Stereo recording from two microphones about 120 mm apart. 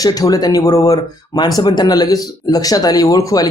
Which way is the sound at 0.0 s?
30° left (ahead or behind).